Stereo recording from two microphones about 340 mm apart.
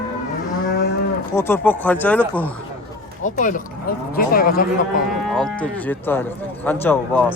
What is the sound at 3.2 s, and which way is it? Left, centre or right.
Speech, left.